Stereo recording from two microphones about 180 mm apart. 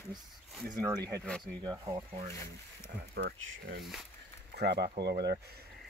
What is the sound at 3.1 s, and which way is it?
Speech, 75° right (ahead or behind).